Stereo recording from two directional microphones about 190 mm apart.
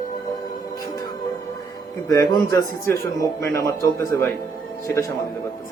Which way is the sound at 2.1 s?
20° left (ahead or behind).